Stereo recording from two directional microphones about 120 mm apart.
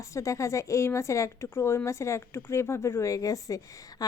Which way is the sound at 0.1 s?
25° left (ahead or behind).